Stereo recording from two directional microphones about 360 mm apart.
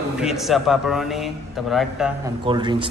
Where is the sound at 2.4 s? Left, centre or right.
Centre.